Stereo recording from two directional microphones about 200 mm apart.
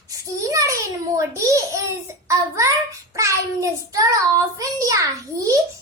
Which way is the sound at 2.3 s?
15° right (ahead or behind).